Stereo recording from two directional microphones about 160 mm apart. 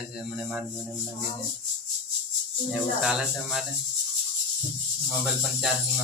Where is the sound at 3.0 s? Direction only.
5° right (ahead or behind).